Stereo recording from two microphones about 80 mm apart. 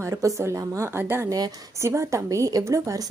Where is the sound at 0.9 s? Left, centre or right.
Right.